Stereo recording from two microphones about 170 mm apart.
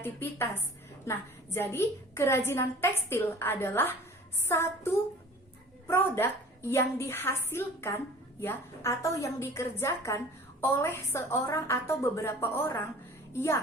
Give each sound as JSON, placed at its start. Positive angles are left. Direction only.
{"t": 0.0, "sound": "a woman's voice", "side_deg": 15}
{"t": 5.9, "sound": "a woman's voice", "side_deg": 15}